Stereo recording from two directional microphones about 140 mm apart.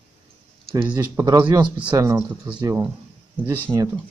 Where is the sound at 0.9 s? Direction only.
25° right (ahead or behind).